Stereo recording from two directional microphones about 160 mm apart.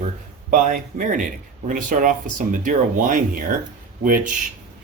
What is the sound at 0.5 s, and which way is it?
Speech, 55° right (ahead or behind).